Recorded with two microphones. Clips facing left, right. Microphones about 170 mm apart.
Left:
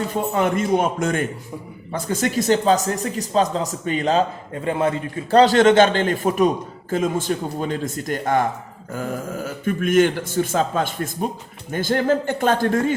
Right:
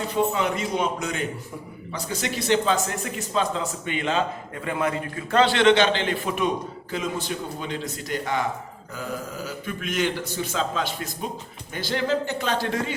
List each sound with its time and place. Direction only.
0.1 s speech: 50° left (ahead or behind)